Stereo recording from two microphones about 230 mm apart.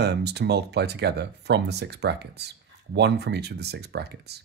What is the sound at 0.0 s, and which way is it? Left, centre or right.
Speech, right.